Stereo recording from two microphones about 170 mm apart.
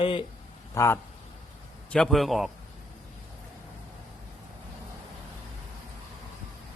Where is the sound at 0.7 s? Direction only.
15° left (ahead or behind).